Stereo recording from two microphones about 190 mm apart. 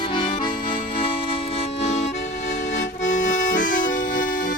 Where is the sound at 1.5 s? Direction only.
35° left (ahead or behind).